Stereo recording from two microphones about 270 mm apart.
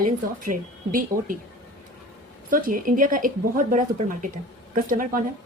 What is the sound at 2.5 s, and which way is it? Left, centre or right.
A woman's voice, right.